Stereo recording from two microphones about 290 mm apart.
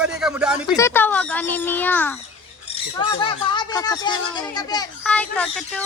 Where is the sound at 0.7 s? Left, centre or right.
Centre.